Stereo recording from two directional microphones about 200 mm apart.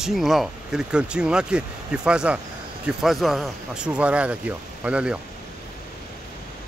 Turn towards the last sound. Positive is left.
turn(degrees=-5)  # may be behind; listen again after turning